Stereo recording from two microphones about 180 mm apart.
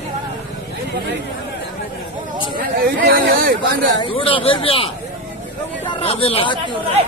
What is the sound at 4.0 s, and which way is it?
Speech, 30° left (ahead or behind).